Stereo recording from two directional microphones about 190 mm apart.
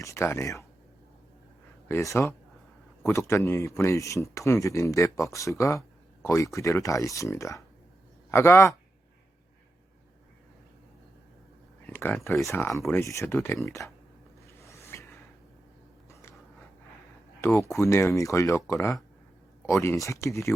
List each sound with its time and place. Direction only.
0.0 s speech: 15° left (ahead or behind)
1.9 s a man's voice: 15° left (ahead or behind)
11.9 s speech: 10° left (ahead or behind)
14.4 s a sound: 15° left (ahead or behind)
17.4 s speech: 15° left (ahead or behind)